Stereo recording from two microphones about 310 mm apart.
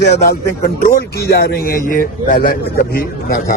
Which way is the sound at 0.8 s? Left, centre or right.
Left.